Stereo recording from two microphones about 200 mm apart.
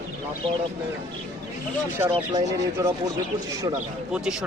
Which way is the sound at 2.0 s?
15° right (ahead or behind).